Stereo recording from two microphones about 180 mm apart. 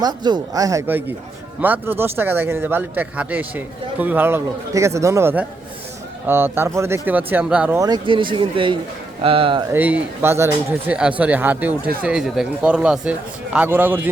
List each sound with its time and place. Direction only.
0.0 s a man's voice: 25° right (ahead or behind)
7.8 s speech: 25° right (ahead or behind)
9.7 s a man's voice: 10° right (ahead or behind)